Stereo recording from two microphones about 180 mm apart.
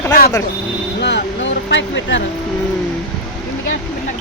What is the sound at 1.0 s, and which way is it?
Speech, 75° left (ahead or behind).